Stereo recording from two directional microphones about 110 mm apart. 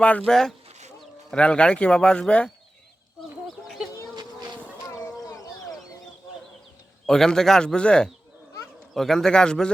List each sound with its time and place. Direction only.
0.0 s speech: 10° left (ahead or behind)
3.4 s fowl: centre (ahead or behind)
4.1 s bee: 40° right (ahead or behind)
4.9 s a sound: 30° left (ahead or behind)
7.1 s speech: 5° left (ahead or behind)